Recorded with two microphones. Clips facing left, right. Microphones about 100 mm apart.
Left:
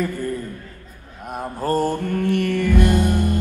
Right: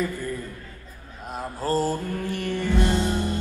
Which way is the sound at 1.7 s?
60° left (ahead or behind).